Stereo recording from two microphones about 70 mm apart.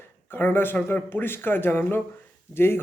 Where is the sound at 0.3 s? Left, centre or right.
Left.